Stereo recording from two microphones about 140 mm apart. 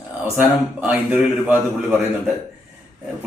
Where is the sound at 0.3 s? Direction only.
10° right (ahead or behind).